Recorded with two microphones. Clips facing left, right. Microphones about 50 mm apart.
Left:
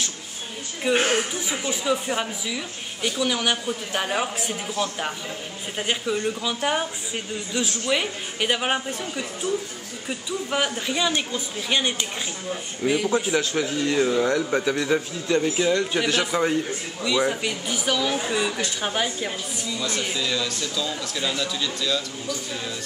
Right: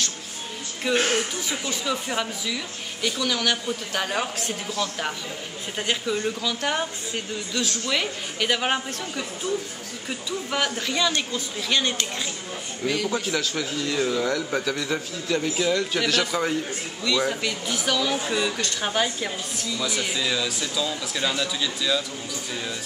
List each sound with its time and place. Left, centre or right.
0.8 s a woman's voice: centre